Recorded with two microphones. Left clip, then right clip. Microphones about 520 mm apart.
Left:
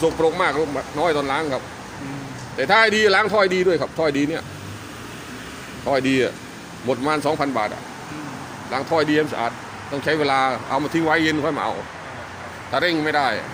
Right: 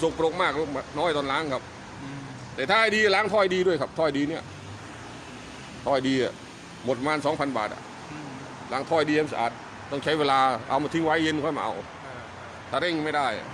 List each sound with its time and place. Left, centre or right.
0.0 s speech: right
5.8 s speech: right
8.7 s speech: right
12.7 s a man's voice: right